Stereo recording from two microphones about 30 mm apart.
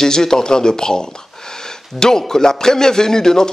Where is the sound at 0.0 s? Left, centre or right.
Centre.